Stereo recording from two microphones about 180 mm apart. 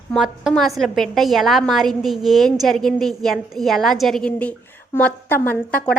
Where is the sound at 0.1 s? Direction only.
Centre (ahead or behind).